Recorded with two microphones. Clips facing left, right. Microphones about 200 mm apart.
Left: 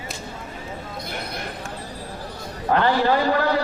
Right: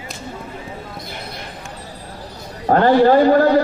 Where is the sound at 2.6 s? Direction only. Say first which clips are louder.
Right 7 dB; 45° right (ahead or behind).